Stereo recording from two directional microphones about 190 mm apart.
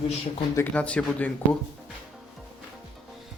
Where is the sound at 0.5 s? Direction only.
10° left (ahead or behind).